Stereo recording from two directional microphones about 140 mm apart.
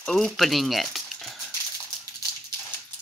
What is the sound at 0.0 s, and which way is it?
Speech, centre (ahead or behind).